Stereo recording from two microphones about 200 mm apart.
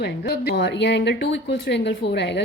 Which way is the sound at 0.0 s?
55° left (ahead or behind).